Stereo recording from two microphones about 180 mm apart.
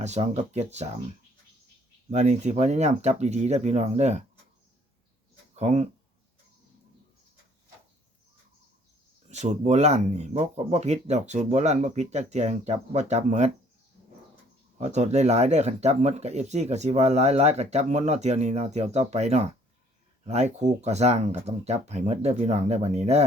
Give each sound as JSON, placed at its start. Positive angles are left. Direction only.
{"t": 0.0, "sound": "speech", "side_deg": -40}
{"t": 2.0, "sound": "speech", "side_deg": -40}
{"t": 5.5, "sound": "speech", "side_deg": -35}
{"t": 9.3, "sound": "speech", "side_deg": -40}
{"t": 14.8, "sound": "speech", "side_deg": -40}